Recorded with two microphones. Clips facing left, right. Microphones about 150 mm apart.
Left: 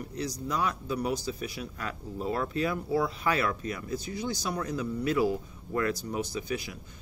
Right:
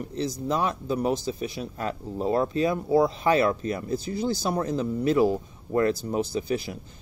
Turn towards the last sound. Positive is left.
turn(degrees=-30)  # may be behind; listen again after turning